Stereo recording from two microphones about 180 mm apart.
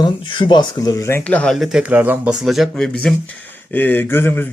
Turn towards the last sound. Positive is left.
turn(degrees=10)  # may be behind; listen again after turning